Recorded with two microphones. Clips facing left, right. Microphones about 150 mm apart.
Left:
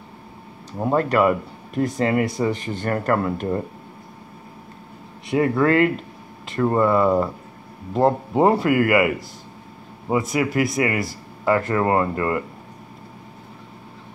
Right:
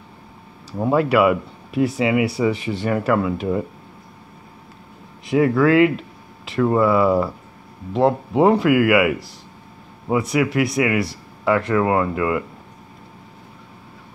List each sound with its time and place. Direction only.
0.9 s speech: 5° right (ahead or behind)
2.0 s speech: 40° left (ahead or behind)
2.8 s speech: centre (ahead or behind)
5.2 s speech: centre (ahead or behind)